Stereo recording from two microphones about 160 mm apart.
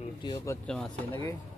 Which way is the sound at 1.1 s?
15° left (ahead or behind).